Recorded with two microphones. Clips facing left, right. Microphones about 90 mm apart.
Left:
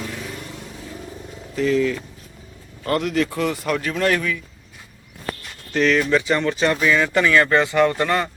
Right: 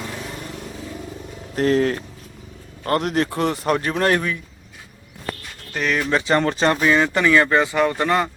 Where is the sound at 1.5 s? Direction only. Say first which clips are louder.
Right 1 dB; 55° right (ahead or behind).